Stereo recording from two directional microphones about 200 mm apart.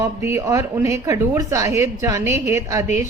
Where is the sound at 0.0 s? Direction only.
10° right (ahead or behind).